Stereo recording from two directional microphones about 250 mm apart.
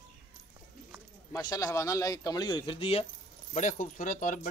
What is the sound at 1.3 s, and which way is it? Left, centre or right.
Speech, centre.